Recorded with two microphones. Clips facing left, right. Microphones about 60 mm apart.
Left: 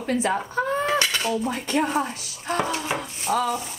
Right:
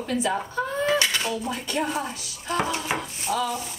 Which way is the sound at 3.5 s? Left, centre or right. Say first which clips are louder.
Left 3 dB; left.